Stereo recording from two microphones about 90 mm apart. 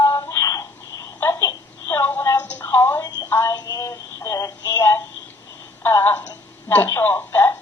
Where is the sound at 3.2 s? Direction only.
30° left (ahead or behind).